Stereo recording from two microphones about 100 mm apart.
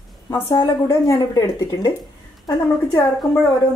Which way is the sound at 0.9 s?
35° left (ahead or behind).